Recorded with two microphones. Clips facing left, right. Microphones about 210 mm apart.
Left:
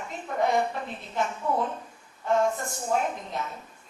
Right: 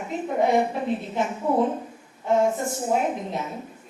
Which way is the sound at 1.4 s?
25° right (ahead or behind).